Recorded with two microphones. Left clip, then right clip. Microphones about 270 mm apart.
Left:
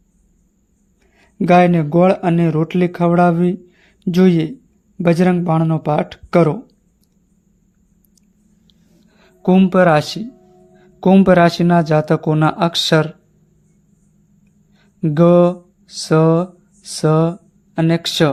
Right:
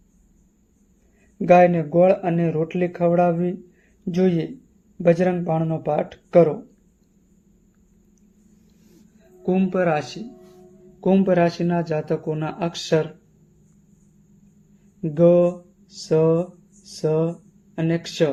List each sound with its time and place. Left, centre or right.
1.4 s speech: left
9.4 s speech: left
15.0 s speech: left